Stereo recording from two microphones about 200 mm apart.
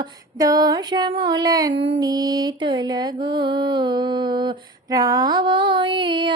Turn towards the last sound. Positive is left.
turn(degrees=-25)  # may be behind; listen again after turning